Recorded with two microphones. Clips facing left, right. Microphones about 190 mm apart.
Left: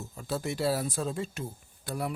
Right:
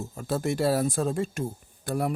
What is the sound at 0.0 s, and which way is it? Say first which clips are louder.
Speech: right 5 dB; 50° right (ahead or behind).